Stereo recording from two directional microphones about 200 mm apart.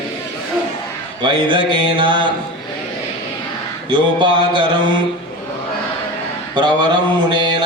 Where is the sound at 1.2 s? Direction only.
25° right (ahead or behind).